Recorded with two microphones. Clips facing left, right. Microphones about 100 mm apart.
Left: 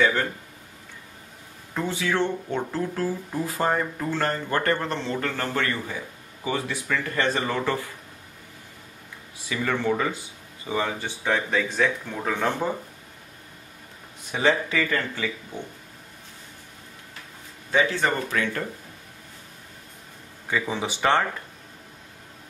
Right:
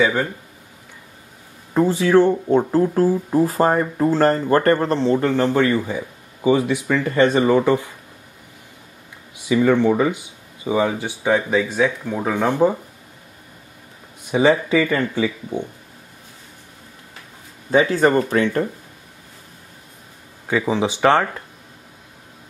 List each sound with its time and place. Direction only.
0.0 s speech: 10° right (ahead or behind)
1.7 s speech: 35° right (ahead or behind)
5.2 s speech: 20° right (ahead or behind)
9.5 s speech: 20° right (ahead or behind)
14.3 s speech: 15° right (ahead or behind)
17.6 s speech: 40° right (ahead or behind)
18.4 s speech: 25° right (ahead or behind)
20.6 s speech: 20° right (ahead or behind)